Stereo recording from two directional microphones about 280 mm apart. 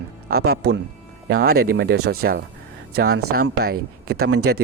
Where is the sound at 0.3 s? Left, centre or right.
Right.